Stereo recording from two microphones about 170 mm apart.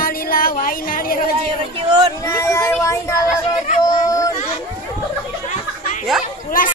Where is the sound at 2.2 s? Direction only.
15° left (ahead or behind).